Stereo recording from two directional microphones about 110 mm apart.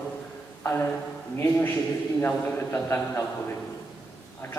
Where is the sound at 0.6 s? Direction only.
20° left (ahead or behind).